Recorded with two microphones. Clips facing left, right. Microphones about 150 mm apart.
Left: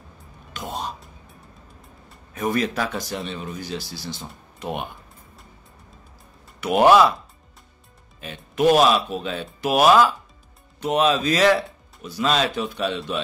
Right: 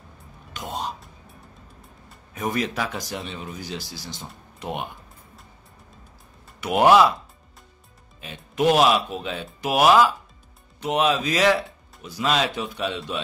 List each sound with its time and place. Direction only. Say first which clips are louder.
2.3 s speech: left 3 dB; 15° right (ahead or behind)
6.6 s speech: left 1 dB; 15° right (ahead or behind)
8.2 s speech: left 2 dB; 15° right (ahead or behind)